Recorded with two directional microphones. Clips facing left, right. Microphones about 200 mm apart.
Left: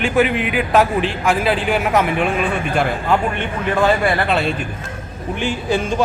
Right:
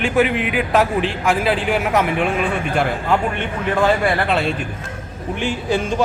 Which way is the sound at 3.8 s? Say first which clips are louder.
Left 1 dB; 25° right (ahead or behind).